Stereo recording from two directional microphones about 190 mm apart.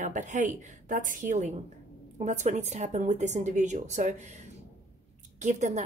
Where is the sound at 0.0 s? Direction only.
40° right (ahead or behind).